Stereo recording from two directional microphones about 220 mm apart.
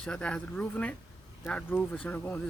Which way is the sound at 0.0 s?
5° left (ahead or behind).